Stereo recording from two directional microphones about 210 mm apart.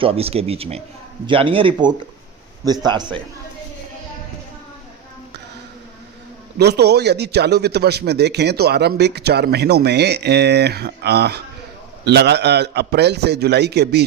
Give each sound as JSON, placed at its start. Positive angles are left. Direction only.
{"t": 0.0, "sound": "speech", "side_deg": -25}
{"t": 6.6, "sound": "a man's voice", "side_deg": -50}